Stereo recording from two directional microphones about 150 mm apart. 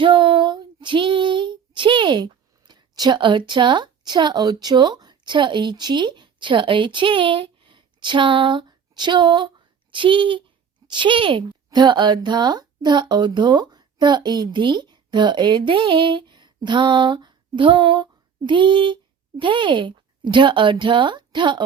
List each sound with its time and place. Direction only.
0.0 s speech: 35° right (ahead or behind)